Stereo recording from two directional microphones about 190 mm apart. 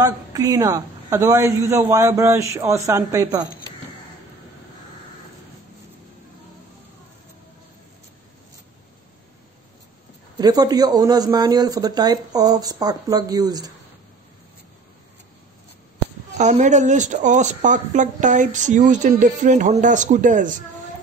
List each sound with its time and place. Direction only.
0.0 s a woman's voice: 20° right (ahead or behind)
10.3 s speech: 20° right (ahead or behind)
16.3 s speech: 40° right (ahead or behind)